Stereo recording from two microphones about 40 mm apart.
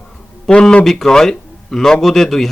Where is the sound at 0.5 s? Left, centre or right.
Left.